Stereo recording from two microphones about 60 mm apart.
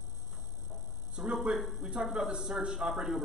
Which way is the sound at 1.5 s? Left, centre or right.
Centre.